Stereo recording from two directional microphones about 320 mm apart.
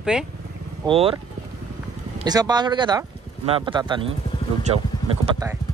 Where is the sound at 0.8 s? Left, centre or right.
Centre.